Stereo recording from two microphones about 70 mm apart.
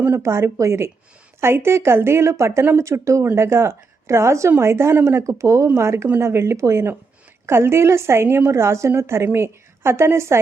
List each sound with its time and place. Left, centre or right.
0.1 s a woman's voice: right